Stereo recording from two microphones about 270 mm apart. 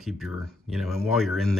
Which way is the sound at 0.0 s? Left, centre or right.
Centre.